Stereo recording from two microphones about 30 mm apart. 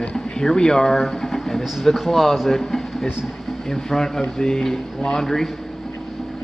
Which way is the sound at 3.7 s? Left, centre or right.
Centre.